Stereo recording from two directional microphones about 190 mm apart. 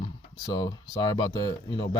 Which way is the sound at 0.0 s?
25° left (ahead or behind).